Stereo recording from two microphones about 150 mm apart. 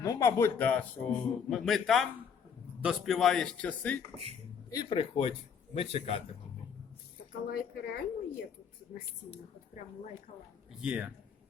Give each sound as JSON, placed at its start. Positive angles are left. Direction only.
{"t": 0.0, "sound": "a man's voice", "side_deg": 20}
{"t": 4.7, "sound": "speech", "side_deg": 25}
{"t": 4.9, "sound": "a man's voice", "side_deg": 40}
{"t": 7.4, "sound": "a woman's voice", "side_deg": 85}
{"t": 10.8, "sound": "speech", "side_deg": -5}